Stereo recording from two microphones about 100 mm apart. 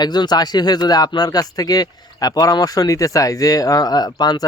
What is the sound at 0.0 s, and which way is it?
Speech, 45° left (ahead or behind).